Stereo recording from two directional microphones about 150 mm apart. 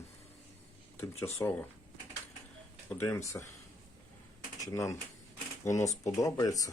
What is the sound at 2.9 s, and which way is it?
Speech, 20° left (ahead or behind).